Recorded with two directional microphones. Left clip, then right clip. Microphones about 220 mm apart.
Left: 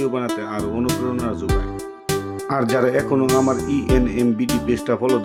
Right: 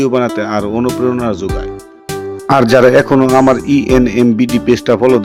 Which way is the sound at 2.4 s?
30° right (ahead or behind).